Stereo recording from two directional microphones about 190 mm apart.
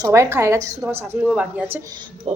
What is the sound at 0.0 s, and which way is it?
A woman's voice, 15° right (ahead or behind).